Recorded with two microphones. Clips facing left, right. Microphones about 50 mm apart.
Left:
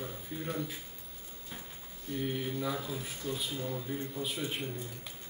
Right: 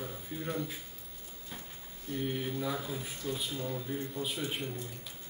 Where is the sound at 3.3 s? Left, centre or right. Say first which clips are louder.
Even; centre.